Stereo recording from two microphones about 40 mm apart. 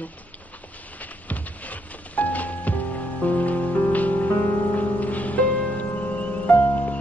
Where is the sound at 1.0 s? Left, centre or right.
Left.